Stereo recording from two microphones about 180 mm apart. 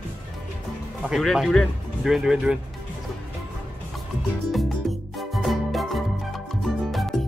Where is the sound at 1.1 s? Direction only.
Centre (ahead or behind).